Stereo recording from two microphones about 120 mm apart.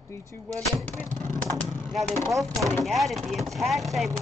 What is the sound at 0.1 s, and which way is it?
Speech, 25° left (ahead or behind).